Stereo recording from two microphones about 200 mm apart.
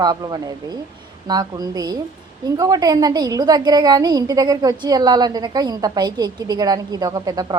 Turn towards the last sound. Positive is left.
turn(degrees=-20)  # may be behind; listen again after turning